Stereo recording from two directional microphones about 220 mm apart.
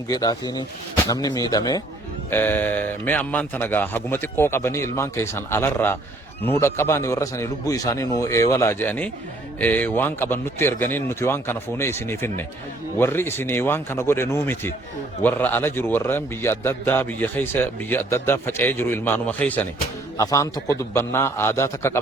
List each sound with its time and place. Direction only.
0.1 s a man's voice: 15° left (ahead or behind)